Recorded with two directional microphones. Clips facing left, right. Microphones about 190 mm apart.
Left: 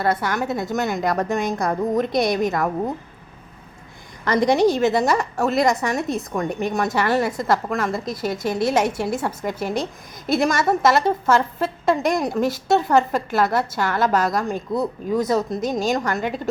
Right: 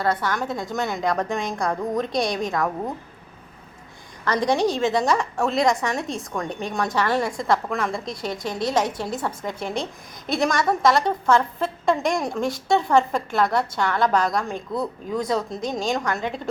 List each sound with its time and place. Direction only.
0.0 s a woman's voice: 10° left (ahead or behind)
4.3 s a woman's voice: 10° left (ahead or behind)
14.7 s speech: 20° left (ahead or behind)
15.1 s a woman's voice: 5° left (ahead or behind)